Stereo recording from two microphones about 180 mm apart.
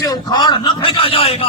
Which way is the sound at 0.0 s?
20° left (ahead or behind).